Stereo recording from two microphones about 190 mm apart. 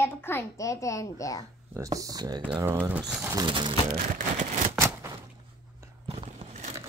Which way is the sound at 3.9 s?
40° right (ahead or behind).